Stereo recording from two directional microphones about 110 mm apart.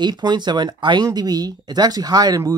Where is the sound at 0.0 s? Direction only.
40° right (ahead or behind).